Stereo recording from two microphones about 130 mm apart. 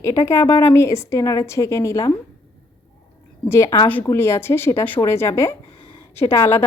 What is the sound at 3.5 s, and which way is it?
Speech, 20° left (ahead or behind).